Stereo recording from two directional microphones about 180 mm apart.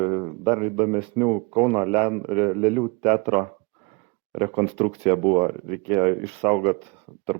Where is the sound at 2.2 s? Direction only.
30° right (ahead or behind).